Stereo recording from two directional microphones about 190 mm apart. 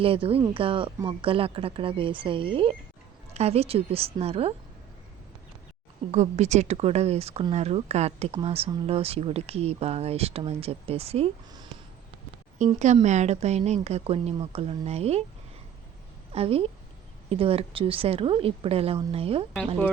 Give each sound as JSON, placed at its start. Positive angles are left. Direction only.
{"t": 0.0, "sound": "a woman's voice", "side_deg": -30}
{"t": 6.1, "sound": "speech", "side_deg": -35}
{"t": 16.3, "sound": "a woman's voice", "side_deg": -30}